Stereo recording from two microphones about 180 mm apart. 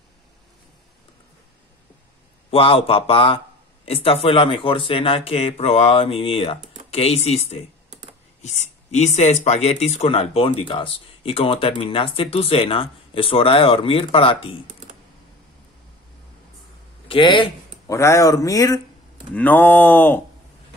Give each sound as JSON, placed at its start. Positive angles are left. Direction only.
{"t": 2.5, "sound": "speech", "side_deg": 30}
{"t": 17.1, "sound": "speech", "side_deg": 25}